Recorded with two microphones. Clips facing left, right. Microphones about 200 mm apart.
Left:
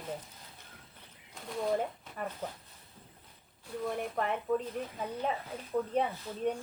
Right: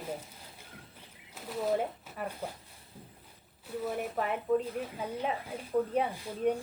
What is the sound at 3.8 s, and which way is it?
Speech, 5° right (ahead or behind).